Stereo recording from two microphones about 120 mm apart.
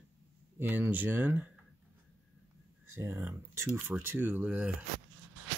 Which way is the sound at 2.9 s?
15° right (ahead or behind).